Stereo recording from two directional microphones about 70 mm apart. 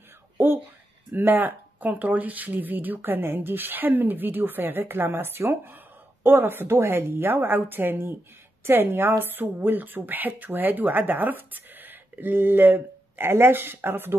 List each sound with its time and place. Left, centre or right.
1.1 s a woman's voice: right